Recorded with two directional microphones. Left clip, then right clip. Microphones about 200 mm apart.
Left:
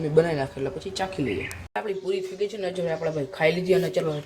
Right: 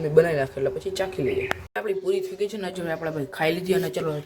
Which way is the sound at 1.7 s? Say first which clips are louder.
Right 1 dB; 10° right (ahead or behind).